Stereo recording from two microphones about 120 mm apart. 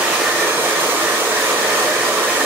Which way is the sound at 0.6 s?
15° right (ahead or behind).